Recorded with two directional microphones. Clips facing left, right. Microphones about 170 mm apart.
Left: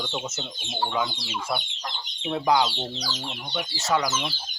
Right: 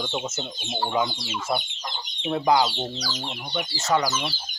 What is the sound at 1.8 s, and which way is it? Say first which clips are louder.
Chicken: right 2 dB; centre (ahead or behind).